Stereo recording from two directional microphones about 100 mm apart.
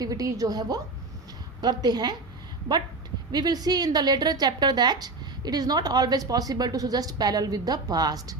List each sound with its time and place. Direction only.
0.0 s a woman's voice: 35° right (ahead or behind)
3.3 s a woman's voice: 40° right (ahead or behind)